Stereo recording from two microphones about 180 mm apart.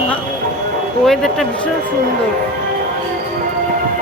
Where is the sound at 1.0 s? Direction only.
Centre (ahead or behind).